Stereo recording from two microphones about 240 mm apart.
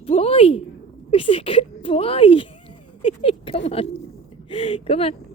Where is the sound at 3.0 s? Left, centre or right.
Left.